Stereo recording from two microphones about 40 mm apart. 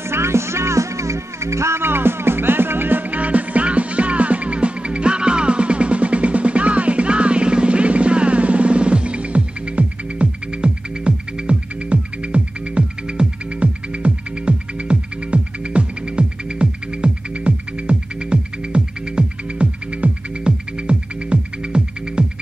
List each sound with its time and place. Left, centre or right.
0.1 s music: right
1.7 s music: right